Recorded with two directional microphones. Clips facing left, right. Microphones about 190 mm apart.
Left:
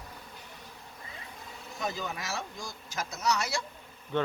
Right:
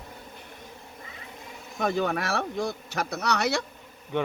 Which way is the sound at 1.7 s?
60° right (ahead or behind).